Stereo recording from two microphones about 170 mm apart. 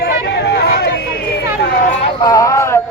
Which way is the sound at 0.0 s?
80° left.